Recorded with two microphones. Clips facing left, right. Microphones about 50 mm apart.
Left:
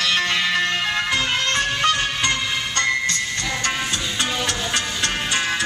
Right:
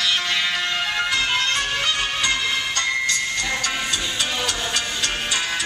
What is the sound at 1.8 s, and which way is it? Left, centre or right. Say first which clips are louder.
Music: left 3 dB; left.